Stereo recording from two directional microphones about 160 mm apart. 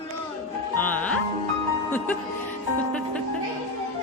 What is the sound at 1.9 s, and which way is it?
Speech, 10° left (ahead or behind).